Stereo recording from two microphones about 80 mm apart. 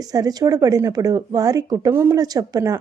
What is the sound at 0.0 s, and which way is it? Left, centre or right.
Speech, right.